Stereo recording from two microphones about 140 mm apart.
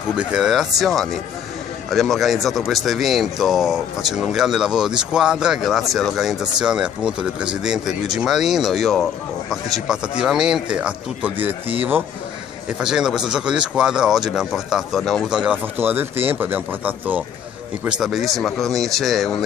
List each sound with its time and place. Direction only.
0.2 s a man's voice: 5° right (ahead or behind)
12.8 s a man's voice: 5° right (ahead or behind)